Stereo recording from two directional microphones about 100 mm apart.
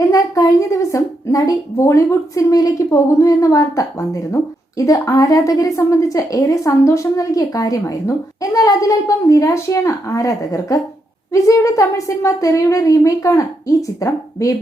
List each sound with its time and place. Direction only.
0.1 s a woman's voice: 35° left (ahead or behind)